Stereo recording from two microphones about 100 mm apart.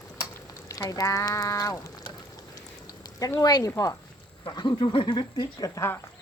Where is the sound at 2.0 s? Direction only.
45° left (ahead or behind).